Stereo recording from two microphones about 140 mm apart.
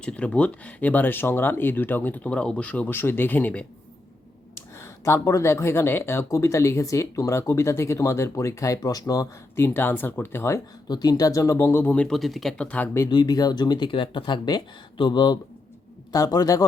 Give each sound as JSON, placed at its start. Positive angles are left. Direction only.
{"t": 0.0, "sound": "speech", "side_deg": 5}
{"t": 4.8, "sound": "speech", "side_deg": 20}
{"t": 10.8, "sound": "speech", "side_deg": 30}
{"t": 13.0, "sound": "speech", "side_deg": 30}